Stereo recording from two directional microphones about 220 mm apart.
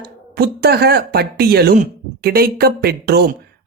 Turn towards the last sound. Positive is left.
turn(degrees=-45)  # may be behind; listen again after turning